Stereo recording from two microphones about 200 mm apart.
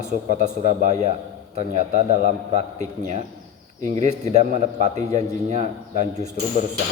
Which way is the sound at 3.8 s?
35° right (ahead or behind).